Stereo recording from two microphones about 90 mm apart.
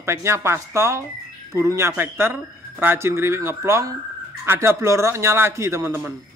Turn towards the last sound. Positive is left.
turn(degrees=-30)  # may be behind; listen again after turning